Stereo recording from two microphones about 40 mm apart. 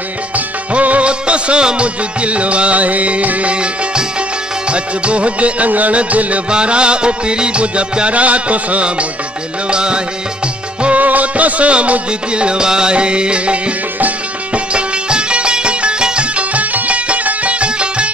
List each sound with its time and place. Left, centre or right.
0.7 s music: right
4.6 s music: right
9.7 s music: right
11.0 s music: right